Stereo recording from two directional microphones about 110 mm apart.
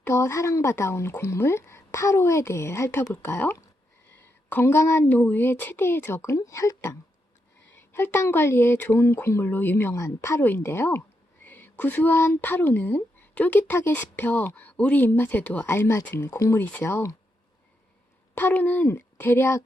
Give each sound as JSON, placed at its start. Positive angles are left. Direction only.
{"t": 0.0, "sound": "speech", "side_deg": 25}
{"t": 18.3, "sound": "speech", "side_deg": 15}